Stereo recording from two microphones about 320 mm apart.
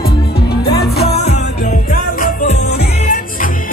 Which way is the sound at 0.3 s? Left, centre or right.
Left.